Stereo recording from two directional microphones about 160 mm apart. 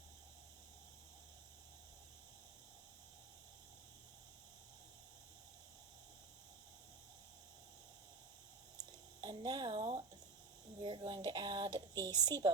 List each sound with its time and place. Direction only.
8.8 s squish: 25° right (ahead or behind)
10.8 s speech: 30° right (ahead or behind)